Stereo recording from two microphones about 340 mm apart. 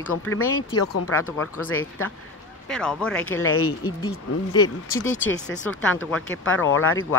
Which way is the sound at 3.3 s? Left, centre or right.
Left.